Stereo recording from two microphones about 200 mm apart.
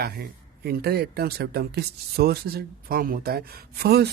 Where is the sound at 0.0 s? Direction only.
50° right (ahead or behind).